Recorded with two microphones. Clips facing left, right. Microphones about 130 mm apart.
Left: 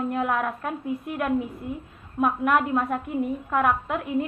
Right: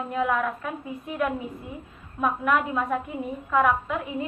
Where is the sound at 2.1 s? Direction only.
50° left (ahead or behind).